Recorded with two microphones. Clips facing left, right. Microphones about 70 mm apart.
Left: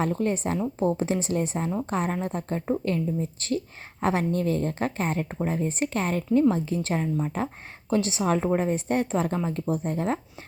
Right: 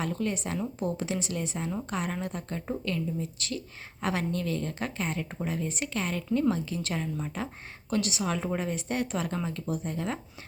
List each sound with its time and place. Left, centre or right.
0.0 s a woman's voice: left